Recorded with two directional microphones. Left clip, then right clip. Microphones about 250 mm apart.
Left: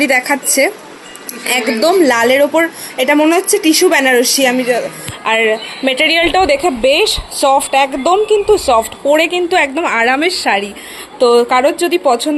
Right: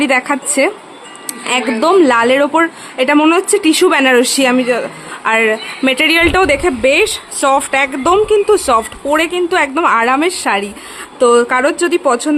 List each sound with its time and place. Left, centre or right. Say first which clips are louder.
0.0 s a woman's voice: left 1 dB; centre